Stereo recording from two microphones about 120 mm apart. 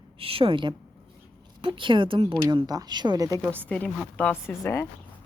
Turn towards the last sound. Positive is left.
turn(degrees=20)  # may be behind; listen again after turning